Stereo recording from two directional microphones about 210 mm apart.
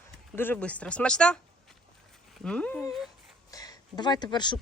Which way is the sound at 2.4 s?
5° left (ahead or behind).